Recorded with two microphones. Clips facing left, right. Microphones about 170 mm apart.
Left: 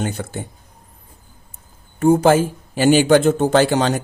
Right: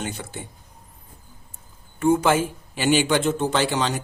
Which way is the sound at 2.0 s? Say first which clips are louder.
Left 6 dB; 40° left (ahead or behind).